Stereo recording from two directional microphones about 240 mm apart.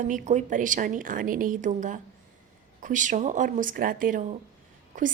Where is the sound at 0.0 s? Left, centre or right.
Right.